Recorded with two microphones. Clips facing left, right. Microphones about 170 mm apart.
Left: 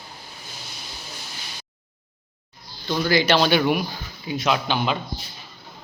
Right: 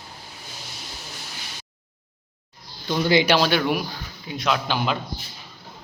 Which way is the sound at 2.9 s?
20° right (ahead or behind).